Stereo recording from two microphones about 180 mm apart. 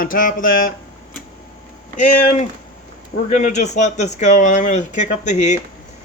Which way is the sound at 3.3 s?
45° left (ahead or behind).